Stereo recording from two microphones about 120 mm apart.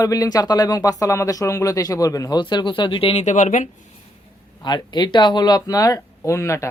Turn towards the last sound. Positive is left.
turn(degrees=25)  # may be behind; listen again after turning